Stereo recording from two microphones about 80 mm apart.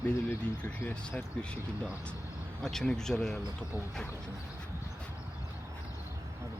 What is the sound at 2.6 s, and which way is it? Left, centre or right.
Speech, centre.